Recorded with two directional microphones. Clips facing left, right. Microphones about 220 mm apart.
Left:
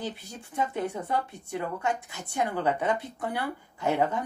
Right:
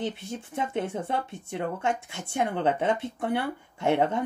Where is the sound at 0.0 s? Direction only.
25° right (ahead or behind).